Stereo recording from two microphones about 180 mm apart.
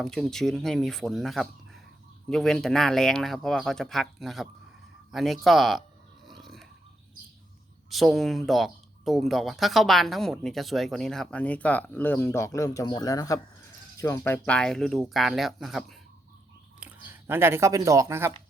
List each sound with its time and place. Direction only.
0.0 s speech: centre (ahead or behind)
6.2 s a sound: centre (ahead or behind)
7.9 s speech: centre (ahead or behind)
16.8 s speech: 10° right (ahead or behind)